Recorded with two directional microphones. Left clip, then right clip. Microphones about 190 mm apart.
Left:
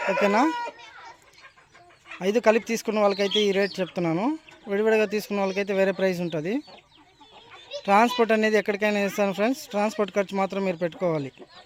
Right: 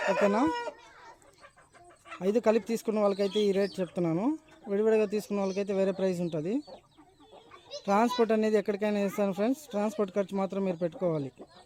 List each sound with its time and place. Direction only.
0.0 s speech: 40° left (ahead or behind)
0.3 s speech: centre (ahead or behind)
2.2 s speech: 5° right (ahead or behind)
7.9 s speech: centre (ahead or behind)